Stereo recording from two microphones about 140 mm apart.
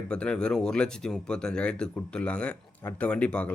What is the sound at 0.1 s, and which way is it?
Speech, 5° left (ahead or behind).